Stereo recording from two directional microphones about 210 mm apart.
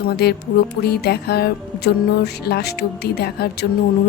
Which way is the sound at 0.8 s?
50° left (ahead or behind).